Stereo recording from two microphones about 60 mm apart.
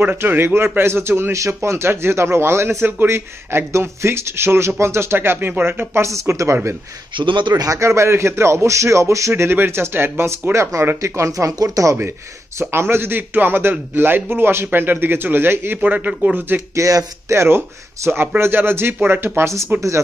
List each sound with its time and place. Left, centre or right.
0.0 s a man's voice: right
1.3 s a man's voice: right
6.3 s a man's voice: right
7.8 s a man's voice: right
9.3 s a man's voice: right
10.5 s a man's voice: right
12.5 s a man's voice: right
15.8 s a man's voice: right
16.7 s a man's voice: right